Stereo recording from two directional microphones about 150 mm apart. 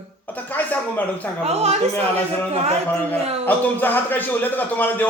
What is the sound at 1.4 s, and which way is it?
Speech, 45° right (ahead or behind).